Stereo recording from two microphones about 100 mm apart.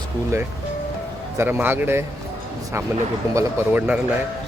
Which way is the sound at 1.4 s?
20° right (ahead or behind).